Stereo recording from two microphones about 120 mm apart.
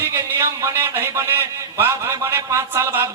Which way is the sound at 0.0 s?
20° right (ahead or behind).